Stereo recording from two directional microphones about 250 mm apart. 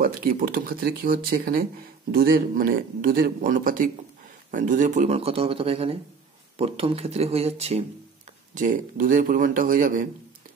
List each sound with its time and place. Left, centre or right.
0.0 s speech: right